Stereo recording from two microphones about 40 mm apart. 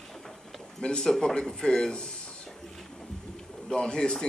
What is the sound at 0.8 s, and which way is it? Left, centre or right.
Speech, left.